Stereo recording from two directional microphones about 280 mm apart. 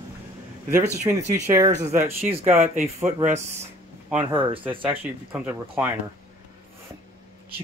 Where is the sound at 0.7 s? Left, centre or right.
Centre.